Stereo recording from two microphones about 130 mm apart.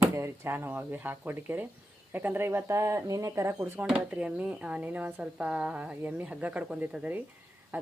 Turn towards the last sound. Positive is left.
turn(degrees=-15)  # may be behind; listen again after turning